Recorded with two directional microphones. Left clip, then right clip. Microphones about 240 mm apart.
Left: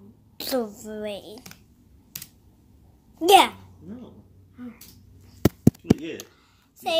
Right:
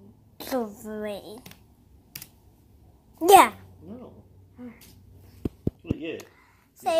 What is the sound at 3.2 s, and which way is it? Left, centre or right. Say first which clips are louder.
Speech: right 1 dB; centre.